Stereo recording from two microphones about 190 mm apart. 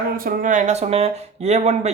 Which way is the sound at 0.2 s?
45° right (ahead or behind).